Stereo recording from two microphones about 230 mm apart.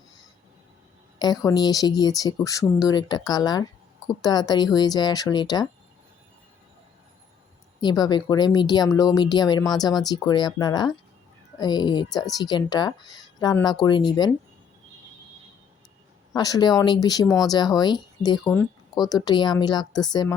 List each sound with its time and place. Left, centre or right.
1.2 s speech: centre
7.8 s a woman's voice: centre
16.3 s speech: centre